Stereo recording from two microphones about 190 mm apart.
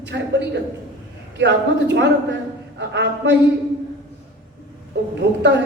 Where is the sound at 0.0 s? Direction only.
65° right (ahead or behind).